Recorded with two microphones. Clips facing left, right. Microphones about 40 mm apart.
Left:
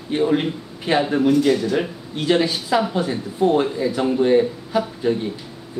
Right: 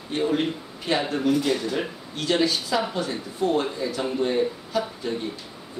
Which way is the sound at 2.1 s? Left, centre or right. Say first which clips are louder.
Left 4 dB; centre.